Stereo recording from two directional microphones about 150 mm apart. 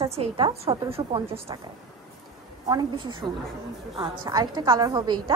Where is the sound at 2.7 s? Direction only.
30° right (ahead or behind).